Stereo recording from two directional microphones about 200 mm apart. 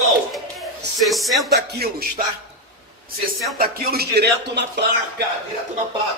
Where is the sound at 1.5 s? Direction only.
50° right (ahead or behind).